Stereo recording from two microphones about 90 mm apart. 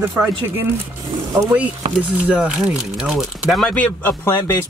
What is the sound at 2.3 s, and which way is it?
Speech, 10° right (ahead or behind).